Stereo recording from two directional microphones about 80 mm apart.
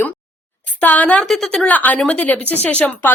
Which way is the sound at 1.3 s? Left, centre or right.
Centre.